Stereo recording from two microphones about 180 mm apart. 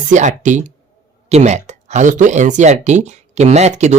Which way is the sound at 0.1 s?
45° right (ahead or behind).